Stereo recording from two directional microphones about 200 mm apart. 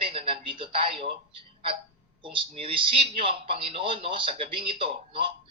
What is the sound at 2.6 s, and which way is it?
A man's voice, 25° right (ahead or behind).